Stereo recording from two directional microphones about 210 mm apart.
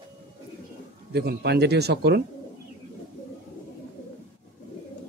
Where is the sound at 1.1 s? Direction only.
50° right (ahead or behind).